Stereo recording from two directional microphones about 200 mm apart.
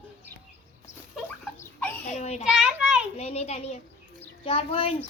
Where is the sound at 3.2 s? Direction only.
30° left (ahead or behind).